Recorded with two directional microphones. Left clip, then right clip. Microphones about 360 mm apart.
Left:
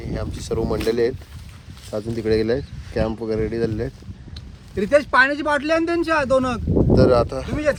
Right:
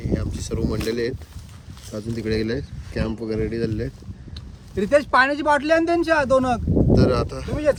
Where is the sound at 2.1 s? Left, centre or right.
Centre.